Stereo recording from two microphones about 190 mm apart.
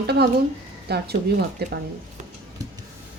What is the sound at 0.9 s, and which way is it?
Speech, 60° right (ahead or behind).